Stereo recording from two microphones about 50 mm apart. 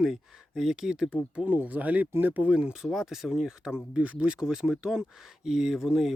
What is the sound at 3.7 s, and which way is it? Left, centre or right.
Speech, right.